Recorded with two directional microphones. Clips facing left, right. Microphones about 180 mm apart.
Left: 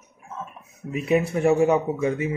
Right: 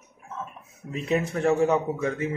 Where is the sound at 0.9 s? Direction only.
10° left (ahead or behind).